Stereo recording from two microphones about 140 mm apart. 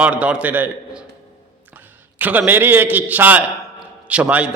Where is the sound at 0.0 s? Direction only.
10° right (ahead or behind).